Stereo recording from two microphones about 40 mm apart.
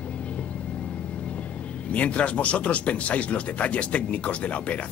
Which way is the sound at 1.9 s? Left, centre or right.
Left.